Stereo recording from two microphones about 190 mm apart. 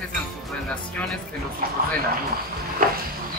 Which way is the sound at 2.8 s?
50° right (ahead or behind).